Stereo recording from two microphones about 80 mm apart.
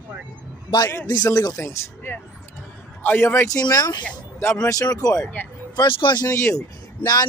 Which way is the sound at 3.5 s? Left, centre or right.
Left.